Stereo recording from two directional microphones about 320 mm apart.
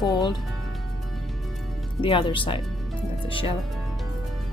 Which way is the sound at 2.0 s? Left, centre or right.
Centre.